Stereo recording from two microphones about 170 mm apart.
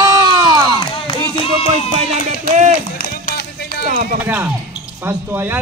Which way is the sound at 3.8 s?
55° right (ahead or behind).